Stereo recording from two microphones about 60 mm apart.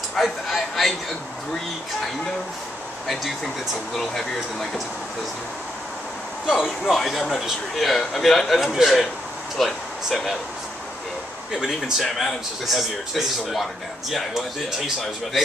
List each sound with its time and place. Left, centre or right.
0.1 s speech: centre
3.1 s speech: centre
6.4 s speech: centre
12.0 s speech: centre